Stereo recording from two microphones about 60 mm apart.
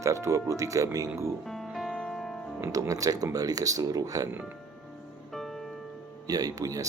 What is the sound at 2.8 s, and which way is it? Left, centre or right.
Speech, right.